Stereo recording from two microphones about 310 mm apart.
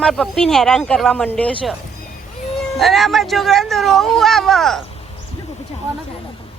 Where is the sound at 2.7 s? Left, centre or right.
Centre.